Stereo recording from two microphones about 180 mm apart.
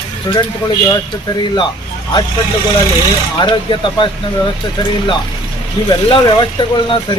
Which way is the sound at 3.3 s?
25° left (ahead or behind).